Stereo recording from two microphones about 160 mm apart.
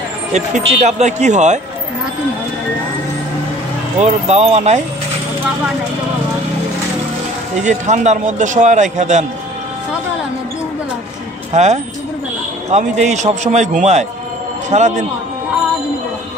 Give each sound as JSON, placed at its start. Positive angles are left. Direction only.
{"t": 0.3, "sound": "a man's voice", "side_deg": -45}
{"t": 4.0, "sound": "a man's voice", "side_deg": -45}
{"t": 7.6, "sound": "a man's voice", "side_deg": -45}
{"t": 11.5, "sound": "a man's voice", "side_deg": -45}